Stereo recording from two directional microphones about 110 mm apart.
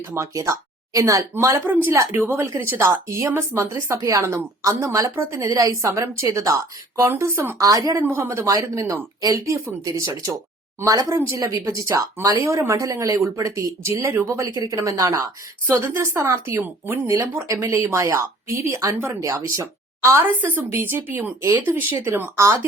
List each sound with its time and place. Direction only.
0.0 s a woman's voice: 25° right (ahead or behind)